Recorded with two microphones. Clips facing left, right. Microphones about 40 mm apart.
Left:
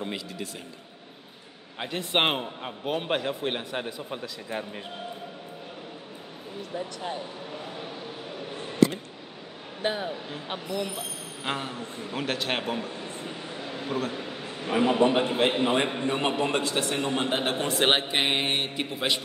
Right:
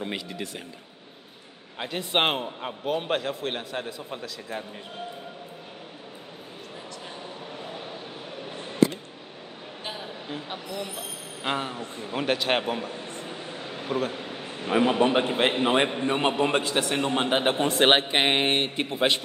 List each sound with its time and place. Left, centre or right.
1.8 s a man's voice: centre
2.9 s a man's voice: centre
10.5 s speech: left
11.4 s a man's voice: centre; by 19.2 s right